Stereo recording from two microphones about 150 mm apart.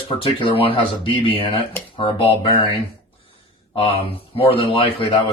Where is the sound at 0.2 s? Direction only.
35° left (ahead or behind).